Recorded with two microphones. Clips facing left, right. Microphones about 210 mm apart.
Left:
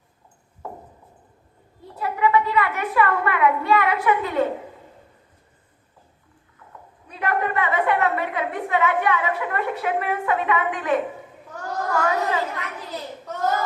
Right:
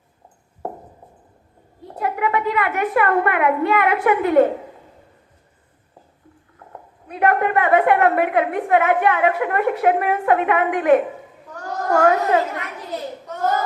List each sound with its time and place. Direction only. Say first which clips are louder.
1.9 s a woman's voice: left 1 dB; 55° right (ahead or behind)
7.1 s a woman's voice: right 6 dB; 55° right (ahead or behind)